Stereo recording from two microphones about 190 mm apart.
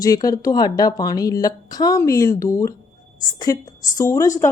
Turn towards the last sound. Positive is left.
turn(degrees=20)  # may be behind; listen again after turning